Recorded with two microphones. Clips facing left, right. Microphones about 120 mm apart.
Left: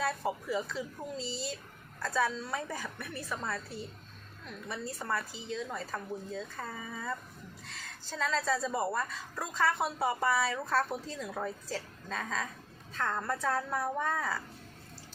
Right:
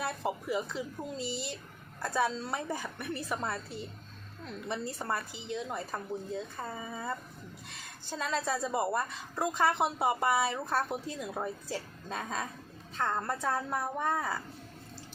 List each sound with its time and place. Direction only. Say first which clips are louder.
0.0 s a woman's voice: left 1 dB; 20° right (ahead or behind)
2.0 s a woman's voice: right 1 dB; 20° right (ahead or behind)
8.1 s a woman's voice: left 1 dB; 20° right (ahead or behind)